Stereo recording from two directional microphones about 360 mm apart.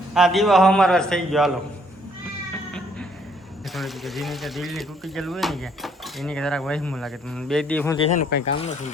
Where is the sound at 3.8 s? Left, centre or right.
Centre.